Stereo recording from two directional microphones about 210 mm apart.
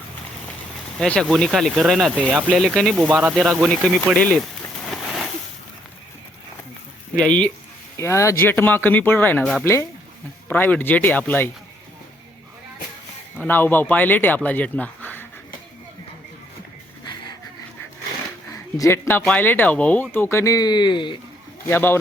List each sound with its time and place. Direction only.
0.9 s speech: 5° left (ahead or behind)
7.2 s speech: 5° left (ahead or behind)
13.4 s speech: 10° left (ahead or behind)
18.5 s speech: 15° left (ahead or behind)
21.7 s speech: 10° left (ahead or behind)